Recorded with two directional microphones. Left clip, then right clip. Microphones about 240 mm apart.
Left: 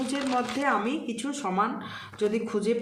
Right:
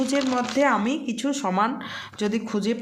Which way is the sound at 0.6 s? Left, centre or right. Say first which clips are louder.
Right 5 dB; right.